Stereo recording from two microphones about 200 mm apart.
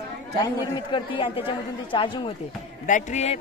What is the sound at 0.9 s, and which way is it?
Speech, 25° left (ahead or behind).